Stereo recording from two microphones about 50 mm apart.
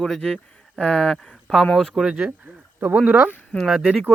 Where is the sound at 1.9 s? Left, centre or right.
Centre.